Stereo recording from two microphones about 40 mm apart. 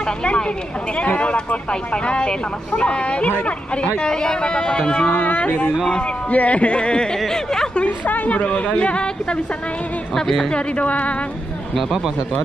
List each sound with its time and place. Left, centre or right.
0.0 s speech: left
5.1 s a woman's voice: left; by 7.7 s centre
7.7 s a woman's voice: left
10.1 s speech: centre
10.5 s a woman's voice: left
11.7 s speech: centre